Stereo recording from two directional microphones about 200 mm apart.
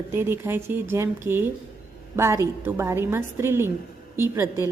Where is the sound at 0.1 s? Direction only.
10° right (ahead or behind).